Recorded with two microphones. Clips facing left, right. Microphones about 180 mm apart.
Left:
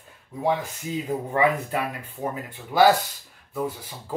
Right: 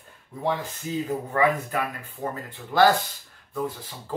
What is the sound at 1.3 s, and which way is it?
Speech, 20° left (ahead or behind).